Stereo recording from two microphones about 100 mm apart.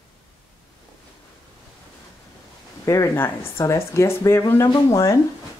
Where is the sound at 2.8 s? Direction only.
35° left (ahead or behind).